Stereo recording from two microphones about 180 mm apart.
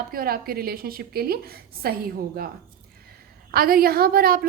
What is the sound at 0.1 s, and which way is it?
A woman's voice, 55° right (ahead or behind).